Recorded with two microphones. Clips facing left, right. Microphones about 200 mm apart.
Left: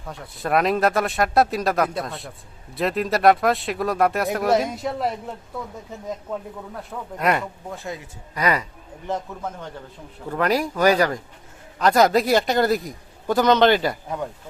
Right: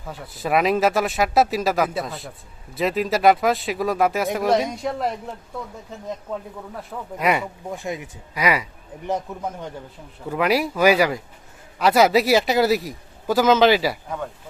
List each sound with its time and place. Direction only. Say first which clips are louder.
0.0 s speech: right 1 dB; centre (ahead or behind)
6.9 s speech: even; centre (ahead or behind)
7.7 s speech: right 3 dB; 15° right (ahead or behind)